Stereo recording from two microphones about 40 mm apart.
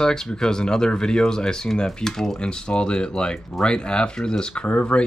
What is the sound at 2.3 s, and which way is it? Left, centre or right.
Speech, left.